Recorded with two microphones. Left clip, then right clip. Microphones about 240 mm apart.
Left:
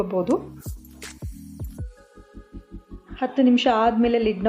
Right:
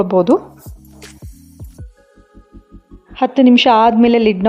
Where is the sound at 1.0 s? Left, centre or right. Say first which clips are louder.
Right 1 dB; centre.